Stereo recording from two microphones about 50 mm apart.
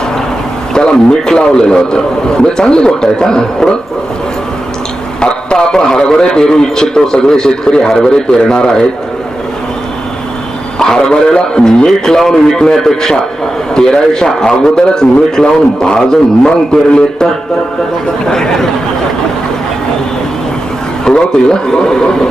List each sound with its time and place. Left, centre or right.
0.7 s a man's voice: centre
5.2 s a man's voice: centre
10.8 s a man's voice: centre
18.3 s a man's voice: centre
21.0 s a man's voice: centre